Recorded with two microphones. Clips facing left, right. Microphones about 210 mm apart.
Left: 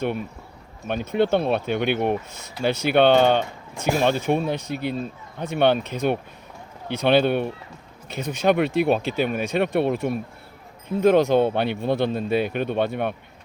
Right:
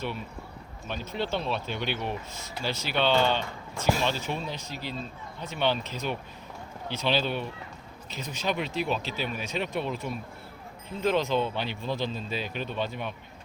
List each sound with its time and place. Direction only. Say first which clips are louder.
0.9 s speech: left 11 dB; 55° left (ahead or behind)